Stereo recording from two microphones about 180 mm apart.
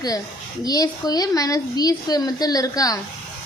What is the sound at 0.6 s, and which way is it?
A woman's voice, 20° left (ahead or behind).